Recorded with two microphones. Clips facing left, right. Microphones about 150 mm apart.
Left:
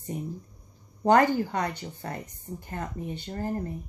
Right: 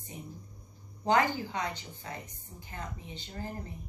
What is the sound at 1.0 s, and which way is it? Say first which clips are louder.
A woman's voice: left 7 dB; 55° left (ahead or behind).